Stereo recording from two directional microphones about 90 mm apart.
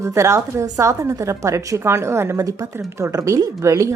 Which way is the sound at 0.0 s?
35° right (ahead or behind).